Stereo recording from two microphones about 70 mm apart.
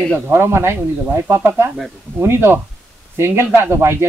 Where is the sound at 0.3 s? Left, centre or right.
Right.